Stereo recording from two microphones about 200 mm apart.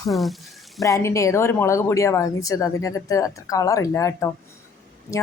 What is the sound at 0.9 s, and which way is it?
Speech, 15° left (ahead or behind).